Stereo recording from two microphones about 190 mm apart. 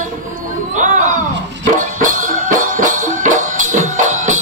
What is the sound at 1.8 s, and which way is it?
Music, 45° right (ahead or behind).